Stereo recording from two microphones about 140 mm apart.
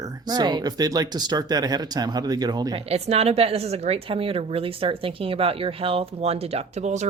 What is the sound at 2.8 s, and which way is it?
Speech, 50° right (ahead or behind).